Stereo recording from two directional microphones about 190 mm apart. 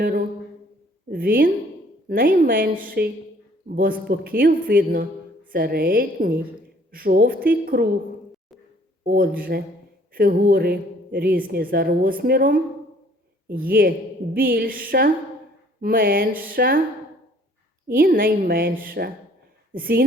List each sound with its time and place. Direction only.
0.0 s a sound: 50° right (ahead or behind)
1.1 s a woman's voice: 50° right (ahead or behind)
9.0 s a woman's voice: 50° right (ahead or behind)
13.6 s a woman's voice: 50° right (ahead or behind)
17.8 s a woman's voice: 50° right (ahead or behind)